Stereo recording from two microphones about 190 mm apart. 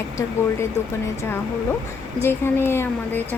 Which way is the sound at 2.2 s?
10° left (ahead or behind).